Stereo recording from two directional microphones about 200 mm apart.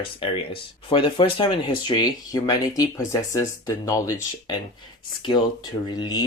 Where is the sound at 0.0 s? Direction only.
25° left (ahead or behind).